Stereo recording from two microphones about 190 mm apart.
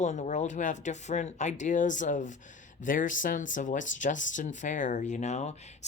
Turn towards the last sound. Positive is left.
turn(degrees=35)  # may be behind; listen again after turning